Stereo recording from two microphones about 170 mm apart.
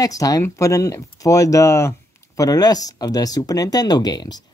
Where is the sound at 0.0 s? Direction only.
20° left (ahead or behind).